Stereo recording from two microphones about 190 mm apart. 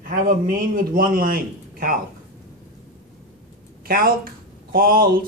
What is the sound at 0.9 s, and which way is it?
Speech, 50° right (ahead or behind).